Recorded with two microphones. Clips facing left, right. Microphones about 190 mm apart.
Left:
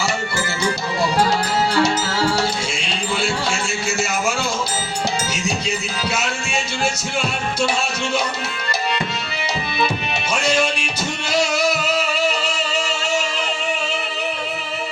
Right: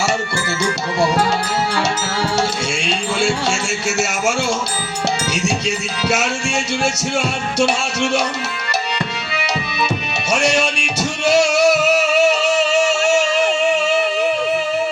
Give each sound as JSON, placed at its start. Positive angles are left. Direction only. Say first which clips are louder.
{"t": 3.2, "sound": "music", "louder": "right 3 dB", "side_deg": -75}
{"t": 6.1, "sound": "music", "louder": "right 6 dB", "side_deg": -75}
{"t": 10.2, "sound": "music", "louder": "right 3 dB", "side_deg": -75}